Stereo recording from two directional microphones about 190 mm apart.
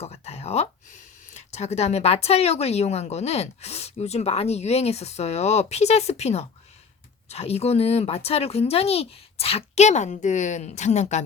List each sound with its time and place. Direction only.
0.0 s speech: 35° left (ahead or behind)